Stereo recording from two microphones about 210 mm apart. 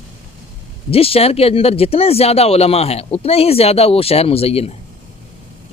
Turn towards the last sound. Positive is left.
turn(degrees=30)  # may be behind; listen again after turning